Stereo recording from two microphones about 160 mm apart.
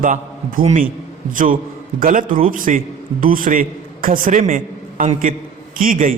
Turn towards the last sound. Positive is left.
turn(degrees=-60)  # may be behind; listen again after turning